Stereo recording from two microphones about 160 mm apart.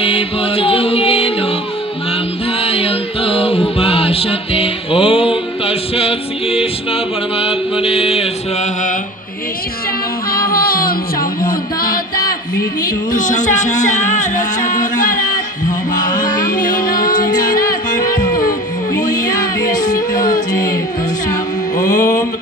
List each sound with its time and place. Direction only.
0.0 s music: 35° left (ahead or behind)
2.6 s music: 35° left (ahead or behind)
10.3 s music: 70° left (ahead or behind)
13.1 s speech: 50° left (ahead or behind)
18.0 s music: 25° left (ahead or behind)